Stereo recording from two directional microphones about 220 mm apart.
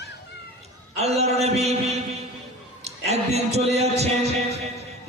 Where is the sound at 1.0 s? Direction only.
30° right (ahead or behind).